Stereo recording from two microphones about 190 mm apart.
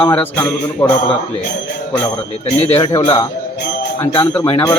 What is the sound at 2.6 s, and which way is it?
Speech, 35° left (ahead or behind).